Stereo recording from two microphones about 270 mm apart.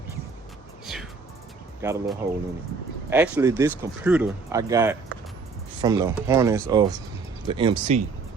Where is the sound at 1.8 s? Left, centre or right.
Centre.